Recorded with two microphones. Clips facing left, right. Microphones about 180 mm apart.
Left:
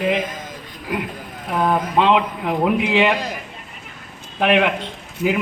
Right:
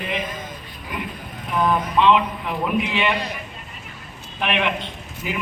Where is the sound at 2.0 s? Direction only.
85° left.